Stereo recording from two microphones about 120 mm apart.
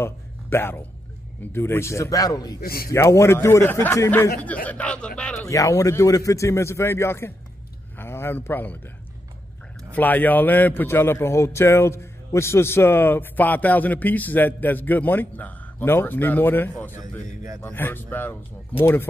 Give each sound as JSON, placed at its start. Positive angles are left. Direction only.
{"t": 0.0, "sound": "a sound", "side_deg": 20}
{"t": 1.4, "sound": "a man's voice", "side_deg": 20}
{"t": 5.5, "sound": "a man's voice", "side_deg": 25}
{"t": 9.9, "sound": "a man's voice", "side_deg": 15}